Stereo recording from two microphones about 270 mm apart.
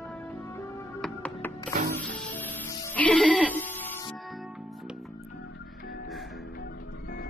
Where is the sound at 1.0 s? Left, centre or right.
Centre.